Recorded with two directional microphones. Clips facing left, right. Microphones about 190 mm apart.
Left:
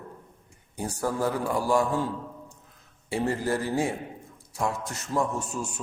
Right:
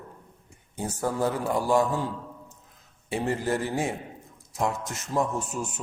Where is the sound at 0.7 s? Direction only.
20° right (ahead or behind).